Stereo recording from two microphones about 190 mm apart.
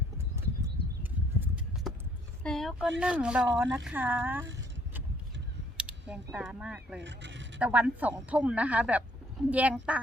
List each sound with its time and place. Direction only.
1.0 s a sound: 10° right (ahead or behind)
2.4 s speech: centre (ahead or behind)
5.7 s speech: 5° right (ahead or behind)
7.0 s speech: 70° right (ahead or behind)
7.6 s speech: 10° right (ahead or behind)